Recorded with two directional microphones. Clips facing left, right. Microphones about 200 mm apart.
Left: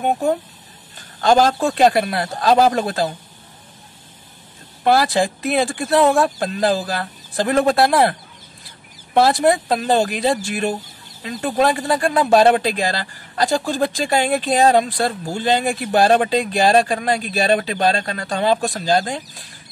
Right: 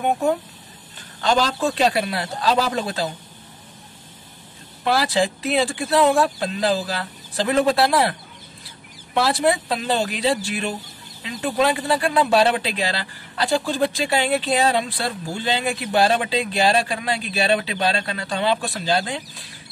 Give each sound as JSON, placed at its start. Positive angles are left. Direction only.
{"t": 1.2, "sound": "speech", "side_deg": 50}
{"t": 4.8, "sound": "speech", "side_deg": 50}